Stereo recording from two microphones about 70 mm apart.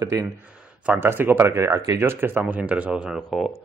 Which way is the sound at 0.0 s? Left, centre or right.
Right.